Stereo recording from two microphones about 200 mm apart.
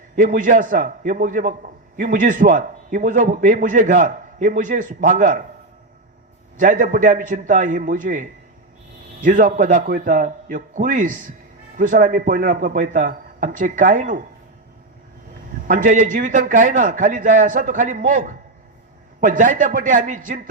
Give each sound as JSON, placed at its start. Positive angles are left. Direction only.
{"t": 0.2, "sound": "a man's voice", "side_deg": -40}
{"t": 6.6, "sound": "a man's voice", "side_deg": -40}
{"t": 15.6, "sound": "a man's voice", "side_deg": -40}